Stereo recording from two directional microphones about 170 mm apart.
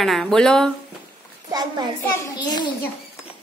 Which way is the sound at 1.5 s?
25° right (ahead or behind).